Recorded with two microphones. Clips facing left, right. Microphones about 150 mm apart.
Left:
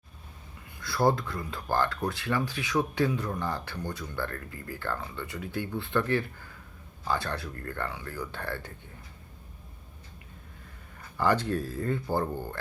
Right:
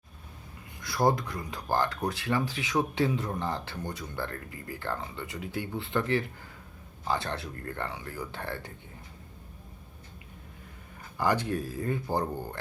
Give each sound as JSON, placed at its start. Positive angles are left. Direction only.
{"t": 0.8, "sound": "speech", "side_deg": -20}
{"t": 11.2, "sound": "speech", "side_deg": -15}